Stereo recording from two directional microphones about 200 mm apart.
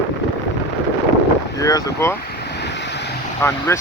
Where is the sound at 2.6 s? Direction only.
60° left (ahead or behind).